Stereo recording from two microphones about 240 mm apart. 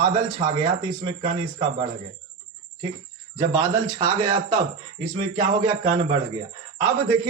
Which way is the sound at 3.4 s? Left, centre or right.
Centre.